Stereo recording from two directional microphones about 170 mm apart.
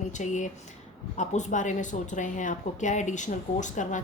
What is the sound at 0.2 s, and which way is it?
A woman's voice, 45° left (ahead or behind).